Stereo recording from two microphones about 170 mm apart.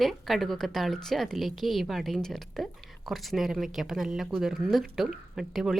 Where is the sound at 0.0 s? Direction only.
Centre (ahead or behind).